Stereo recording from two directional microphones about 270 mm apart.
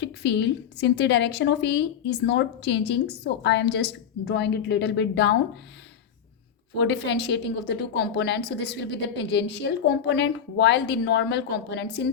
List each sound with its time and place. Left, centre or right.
0.0 s a woman's voice: left
6.7 s a woman's voice: left